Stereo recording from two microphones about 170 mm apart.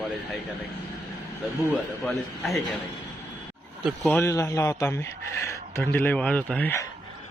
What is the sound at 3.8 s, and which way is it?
Speech, centre (ahead or behind).